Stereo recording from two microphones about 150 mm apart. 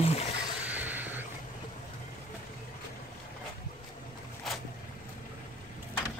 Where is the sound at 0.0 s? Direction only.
40° left (ahead or behind).